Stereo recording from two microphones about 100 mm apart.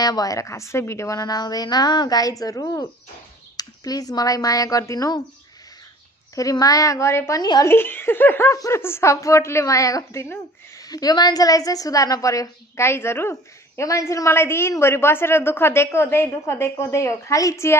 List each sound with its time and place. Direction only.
0.0 s a woman's voice: 40° left (ahead or behind)
6.3 s a woman's voice: 35° left (ahead or behind)